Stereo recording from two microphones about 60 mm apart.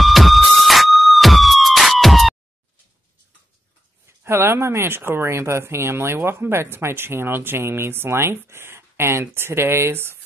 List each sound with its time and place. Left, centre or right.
0.0 s police car: centre
4.2 s speech: right